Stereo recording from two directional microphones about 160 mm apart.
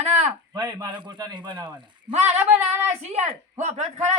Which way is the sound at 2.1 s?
45° right (ahead or behind).